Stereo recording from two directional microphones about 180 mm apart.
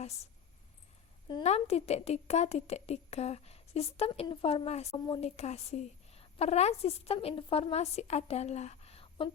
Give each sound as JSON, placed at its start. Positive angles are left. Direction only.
{"t": 1.3, "sound": "speech", "side_deg": 30}